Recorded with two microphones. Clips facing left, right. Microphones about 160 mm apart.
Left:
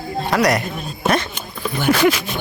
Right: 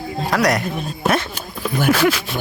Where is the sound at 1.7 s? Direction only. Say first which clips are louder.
Left 1 dB; 5° right (ahead or behind).